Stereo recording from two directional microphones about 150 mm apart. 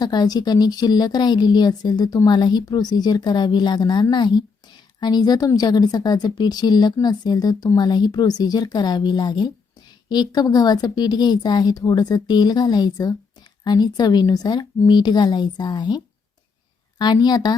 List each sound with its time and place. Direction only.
0.0 s a woman's voice: 25° left (ahead or behind)